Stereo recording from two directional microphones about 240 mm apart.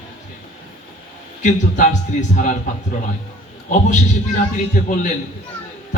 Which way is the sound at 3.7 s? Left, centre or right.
Left.